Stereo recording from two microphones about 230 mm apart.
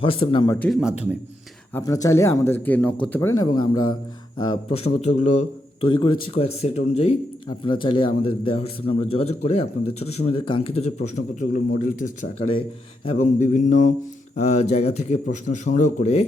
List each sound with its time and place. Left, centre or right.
0.0 s a man's voice: left
0.7 s a man's voice: centre
1.7 s a man's voice: centre